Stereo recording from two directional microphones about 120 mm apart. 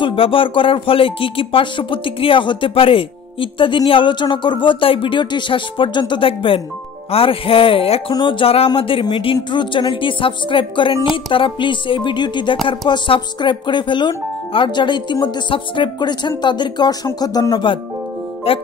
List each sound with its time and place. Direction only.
0.0 s speech: 50° left (ahead or behind)
18.5 s speech: 50° left (ahead or behind)